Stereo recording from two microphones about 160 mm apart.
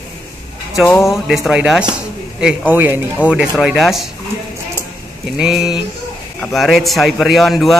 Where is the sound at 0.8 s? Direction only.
15° left (ahead or behind).